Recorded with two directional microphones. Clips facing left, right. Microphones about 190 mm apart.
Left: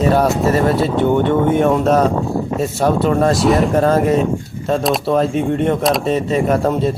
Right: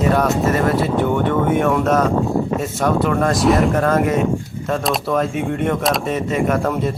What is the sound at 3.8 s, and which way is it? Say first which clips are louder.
Speech: left 3 dB; 30° left (ahead or behind).